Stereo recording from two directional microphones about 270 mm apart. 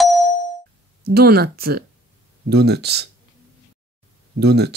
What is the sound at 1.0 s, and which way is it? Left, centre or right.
Speech, right.